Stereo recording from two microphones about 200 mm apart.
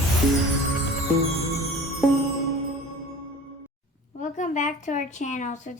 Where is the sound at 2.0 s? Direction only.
Centre (ahead or behind).